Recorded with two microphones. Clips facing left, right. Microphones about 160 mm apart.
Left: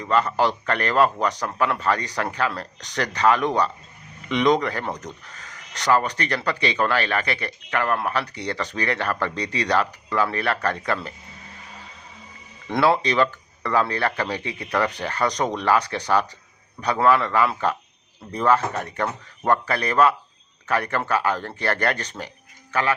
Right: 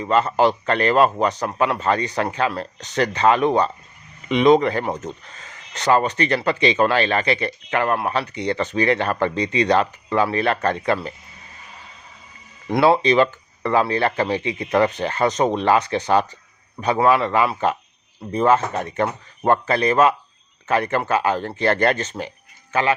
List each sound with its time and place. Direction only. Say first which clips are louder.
0.0 s speech: right 3 dB; 25° right (ahead or behind)
12.8 s speech: right 4 dB; 20° right (ahead or behind)